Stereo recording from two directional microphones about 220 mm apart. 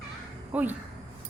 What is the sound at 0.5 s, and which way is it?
Speech, 5° right (ahead or behind).